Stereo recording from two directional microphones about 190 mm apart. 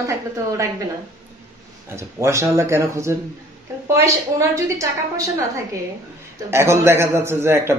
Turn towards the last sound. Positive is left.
turn(degrees=-15)  # may be behind; listen again after turning